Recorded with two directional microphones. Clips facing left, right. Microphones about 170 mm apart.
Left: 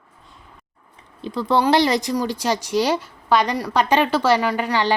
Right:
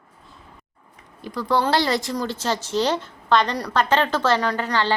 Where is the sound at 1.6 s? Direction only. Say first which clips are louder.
Left 5 dB; 20° left (ahead or behind).